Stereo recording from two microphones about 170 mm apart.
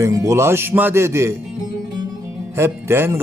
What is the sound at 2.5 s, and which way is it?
Speech, 15° right (ahead or behind).